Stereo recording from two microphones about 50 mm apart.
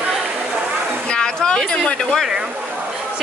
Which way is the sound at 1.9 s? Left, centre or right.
Left.